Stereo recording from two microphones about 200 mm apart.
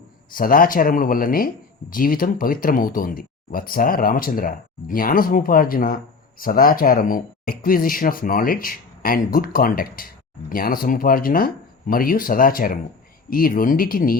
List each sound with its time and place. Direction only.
0.3 s speech: 45° left (ahead or behind)